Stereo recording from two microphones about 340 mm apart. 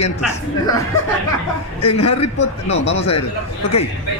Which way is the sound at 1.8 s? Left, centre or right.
Centre.